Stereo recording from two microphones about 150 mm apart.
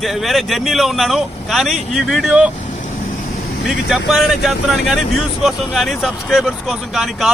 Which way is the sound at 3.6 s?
5° right (ahead or behind).